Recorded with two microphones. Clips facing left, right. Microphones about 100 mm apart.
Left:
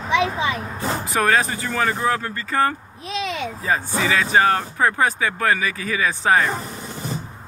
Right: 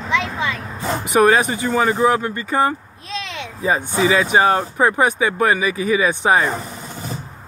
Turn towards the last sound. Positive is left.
turn(degrees=-15)  # may be behind; listen again after turning